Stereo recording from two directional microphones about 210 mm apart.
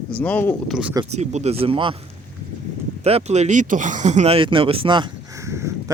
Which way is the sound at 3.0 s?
30° right (ahead or behind).